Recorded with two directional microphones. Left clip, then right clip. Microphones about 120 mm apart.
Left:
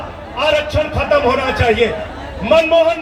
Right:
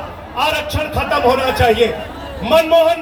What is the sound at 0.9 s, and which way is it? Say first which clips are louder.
A man's voice: right 1 dB; 15° right (ahead or behind).